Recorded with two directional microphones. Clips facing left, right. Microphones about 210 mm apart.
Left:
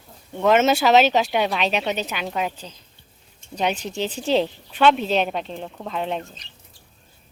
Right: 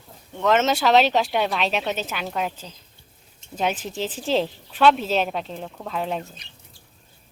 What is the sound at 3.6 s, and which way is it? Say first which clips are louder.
Speech: left 1 dB; centre (ahead or behind).